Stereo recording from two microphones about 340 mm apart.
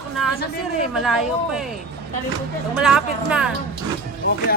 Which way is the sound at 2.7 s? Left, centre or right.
Centre.